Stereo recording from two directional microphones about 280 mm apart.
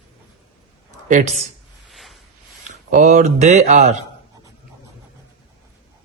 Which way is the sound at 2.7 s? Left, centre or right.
Right.